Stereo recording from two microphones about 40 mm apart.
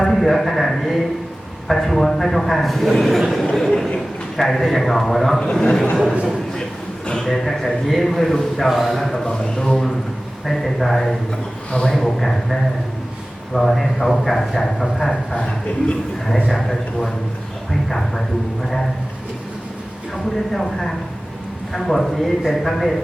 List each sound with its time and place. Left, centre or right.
0.1 s a sound: centre
1.6 s a man's voice: centre
3.5 s a man's voice: centre
5.4 s speech: centre
7.2 s a man's voice: centre
9.1 s speech: centre
10.4 s a man's voice: centre
11.3 s a man's voice: centre
11.9 s speech: centre
15.4 s a man's voice: left
16.5 s a man's voice: centre
20.5 s a man's voice: centre